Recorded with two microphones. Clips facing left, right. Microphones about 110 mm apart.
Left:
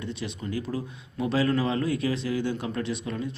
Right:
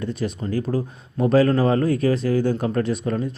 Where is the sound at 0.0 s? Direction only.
45° right (ahead or behind).